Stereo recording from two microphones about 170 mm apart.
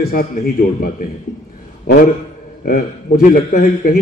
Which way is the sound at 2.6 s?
60° left (ahead or behind).